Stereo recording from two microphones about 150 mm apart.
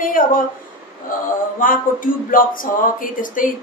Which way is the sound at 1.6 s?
65° left (ahead or behind).